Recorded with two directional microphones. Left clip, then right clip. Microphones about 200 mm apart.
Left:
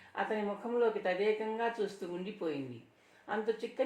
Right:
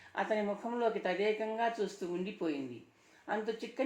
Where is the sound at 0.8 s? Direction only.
45° right (ahead or behind).